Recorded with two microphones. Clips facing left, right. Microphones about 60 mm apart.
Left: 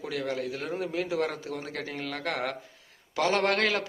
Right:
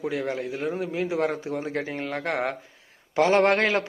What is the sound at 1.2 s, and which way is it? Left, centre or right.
A man's voice, right.